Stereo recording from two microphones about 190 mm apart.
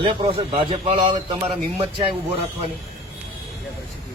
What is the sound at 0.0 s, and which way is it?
A man's voice, 30° right (ahead or behind).